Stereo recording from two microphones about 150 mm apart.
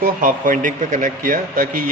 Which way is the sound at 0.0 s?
65° right (ahead or behind).